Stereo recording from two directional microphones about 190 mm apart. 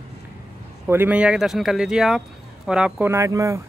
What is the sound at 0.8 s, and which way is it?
Speech, 10° right (ahead or behind).